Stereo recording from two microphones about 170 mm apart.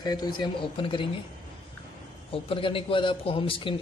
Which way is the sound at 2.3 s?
30° left (ahead or behind).